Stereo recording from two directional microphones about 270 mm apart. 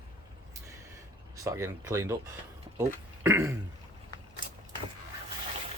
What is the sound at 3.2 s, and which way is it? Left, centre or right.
Speech, centre.